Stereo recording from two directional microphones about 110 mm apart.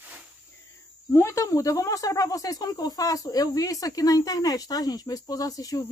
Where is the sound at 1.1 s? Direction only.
25° left (ahead or behind).